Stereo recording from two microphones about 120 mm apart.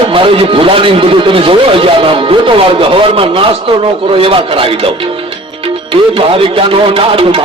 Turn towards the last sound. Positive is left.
turn(degrees=-50)  # may be behind; listen again after turning